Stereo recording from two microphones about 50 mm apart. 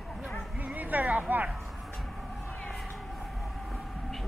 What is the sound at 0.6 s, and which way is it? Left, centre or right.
Music, right.